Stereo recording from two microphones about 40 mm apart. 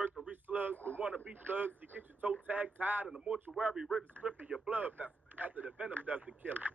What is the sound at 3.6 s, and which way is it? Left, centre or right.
Speech, centre.